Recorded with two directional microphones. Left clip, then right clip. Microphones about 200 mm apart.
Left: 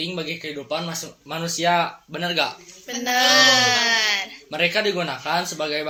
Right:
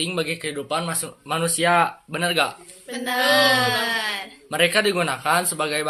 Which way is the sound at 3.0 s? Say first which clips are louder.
Left 2 dB; 15° left (ahead or behind).